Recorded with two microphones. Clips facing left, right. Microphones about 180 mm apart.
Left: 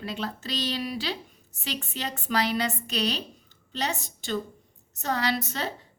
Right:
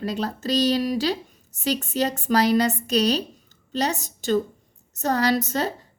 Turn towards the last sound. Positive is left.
turn(degrees=-45)  # may be behind; listen again after turning